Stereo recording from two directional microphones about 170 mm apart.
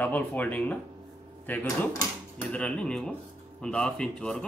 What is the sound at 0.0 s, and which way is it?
Speech, 10° left (ahead or behind).